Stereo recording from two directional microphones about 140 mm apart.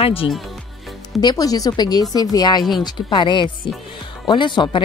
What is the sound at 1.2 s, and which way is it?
Speech, 25° left (ahead or behind).